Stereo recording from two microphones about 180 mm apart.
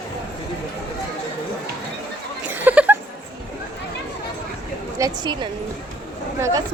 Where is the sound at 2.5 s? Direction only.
10° right (ahead or behind).